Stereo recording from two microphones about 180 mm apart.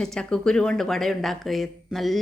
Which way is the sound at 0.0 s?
5° left (ahead or behind).